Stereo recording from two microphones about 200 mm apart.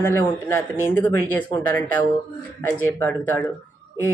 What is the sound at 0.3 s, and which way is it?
Speech, 15° left (ahead or behind).